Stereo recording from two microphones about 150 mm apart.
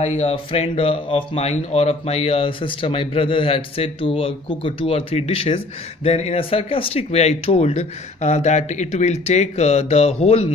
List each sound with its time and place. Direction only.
0.0 s speech: 45° left (ahead or behind)